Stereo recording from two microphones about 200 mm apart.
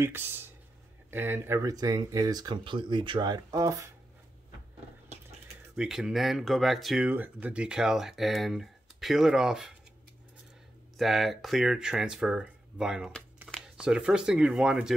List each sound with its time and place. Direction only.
0.0 s speech: 10° right (ahead or behind)
5.8 s speech: centre (ahead or behind)
11.0 s speech: centre (ahead or behind)